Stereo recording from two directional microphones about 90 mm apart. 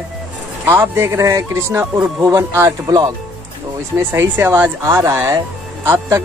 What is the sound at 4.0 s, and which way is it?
Speech, 25° right (ahead or behind).